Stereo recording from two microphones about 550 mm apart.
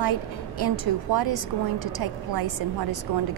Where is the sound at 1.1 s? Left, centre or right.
Right.